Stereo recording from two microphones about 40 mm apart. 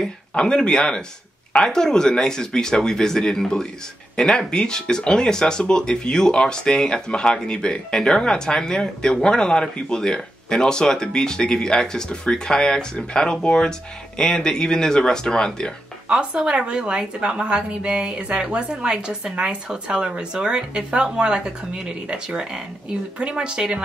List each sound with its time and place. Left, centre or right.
0.3 s speech: left
16.1 s a woman's voice: right